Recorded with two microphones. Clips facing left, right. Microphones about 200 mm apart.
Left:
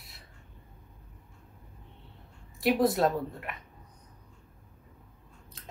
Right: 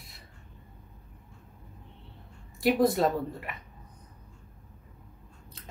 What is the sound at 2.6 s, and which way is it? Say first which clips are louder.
Speech: right 1 dB; centre (ahead or behind).